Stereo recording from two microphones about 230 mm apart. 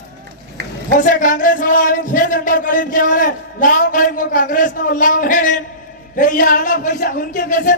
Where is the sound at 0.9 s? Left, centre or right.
Left.